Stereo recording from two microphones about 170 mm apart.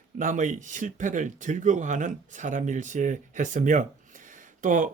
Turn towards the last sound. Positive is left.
turn(degrees=-50)  # may be behind; listen again after turning